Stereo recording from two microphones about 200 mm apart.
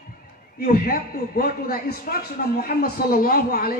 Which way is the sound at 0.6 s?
45° left (ahead or behind).